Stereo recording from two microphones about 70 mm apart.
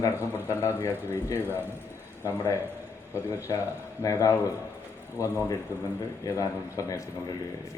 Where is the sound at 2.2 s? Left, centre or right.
Left.